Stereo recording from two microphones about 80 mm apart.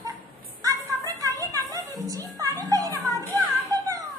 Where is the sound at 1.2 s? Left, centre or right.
Right.